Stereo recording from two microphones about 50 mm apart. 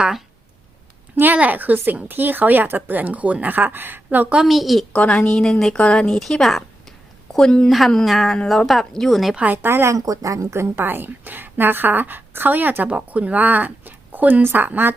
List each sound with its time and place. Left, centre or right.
1.2 s a woman's voice: right
4.4 s speech: centre
4.9 s a woman's voice: left
5.7 s speech: left
6.1 s a woman's voice: centre
8.0 s speech: centre
9.4 s a woman's voice: right
9.6 s speech: right
9.9 s speech: right
10.8 s a woman's voice: right
12.9 s a woman's voice: right